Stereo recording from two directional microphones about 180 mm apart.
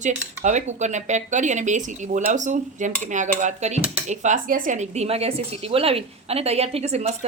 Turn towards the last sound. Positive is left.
turn(degrees=-35)  # may be behind; listen again after turning